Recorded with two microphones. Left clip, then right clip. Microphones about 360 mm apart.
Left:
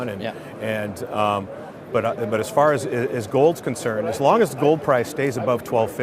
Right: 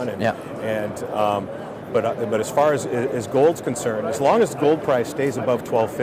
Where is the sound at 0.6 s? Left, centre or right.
Left.